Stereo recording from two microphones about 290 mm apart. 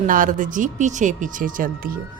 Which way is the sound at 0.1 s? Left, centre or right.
Right.